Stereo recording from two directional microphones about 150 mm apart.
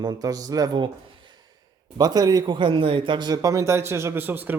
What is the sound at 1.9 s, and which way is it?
Speech, 25° right (ahead or behind).